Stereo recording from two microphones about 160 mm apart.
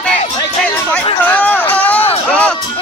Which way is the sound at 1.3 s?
10° left (ahead or behind).